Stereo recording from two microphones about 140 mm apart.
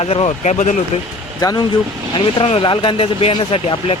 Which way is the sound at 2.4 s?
40° left (ahead or behind).